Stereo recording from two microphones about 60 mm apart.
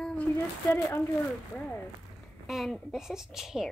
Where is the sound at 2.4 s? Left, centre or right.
Centre.